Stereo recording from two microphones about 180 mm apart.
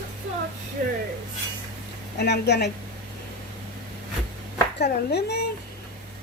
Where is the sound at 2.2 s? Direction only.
65° left (ahead or behind).